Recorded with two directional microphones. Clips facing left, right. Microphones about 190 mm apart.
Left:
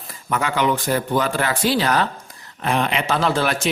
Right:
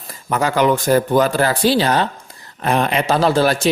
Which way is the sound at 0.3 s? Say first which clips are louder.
Right 5 dB; 40° right (ahead or behind).